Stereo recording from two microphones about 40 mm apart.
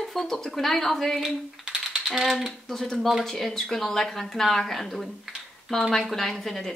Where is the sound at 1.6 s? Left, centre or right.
Right.